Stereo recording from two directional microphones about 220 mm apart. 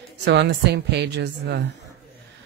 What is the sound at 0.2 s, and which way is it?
Speech, 50° right (ahead or behind).